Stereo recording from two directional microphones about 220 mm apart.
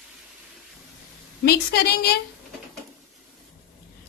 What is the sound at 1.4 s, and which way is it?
Speech, 45° left (ahead or behind).